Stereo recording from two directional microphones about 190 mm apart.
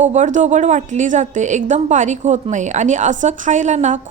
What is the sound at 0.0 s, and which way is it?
A woman's voice, 40° right (ahead or behind).